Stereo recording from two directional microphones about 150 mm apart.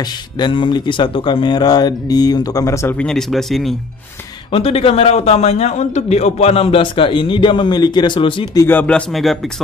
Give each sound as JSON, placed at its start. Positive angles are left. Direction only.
{"t": 0.0, "sound": "speech", "side_deg": 30}
{"t": 3.0, "sound": "speech", "side_deg": 5}
{"t": 4.5, "sound": "a man's voice", "side_deg": 40}
{"t": 8.5, "sound": "speech", "side_deg": 15}